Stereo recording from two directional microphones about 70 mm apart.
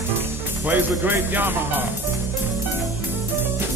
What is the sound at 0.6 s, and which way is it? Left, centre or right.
Speech, right.